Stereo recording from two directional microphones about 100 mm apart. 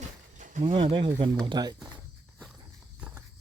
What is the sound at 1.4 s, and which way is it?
Speech, 45° right (ahead or behind).